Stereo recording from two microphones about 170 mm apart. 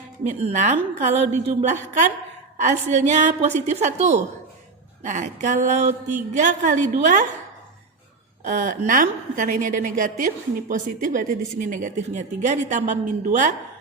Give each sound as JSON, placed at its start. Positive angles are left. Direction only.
{"t": 0.3, "sound": "a woman's voice", "side_deg": -40}
{"t": 8.4, "sound": "a woman's voice", "side_deg": -50}